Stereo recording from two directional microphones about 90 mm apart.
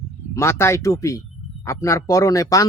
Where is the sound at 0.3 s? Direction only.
30° left (ahead or behind).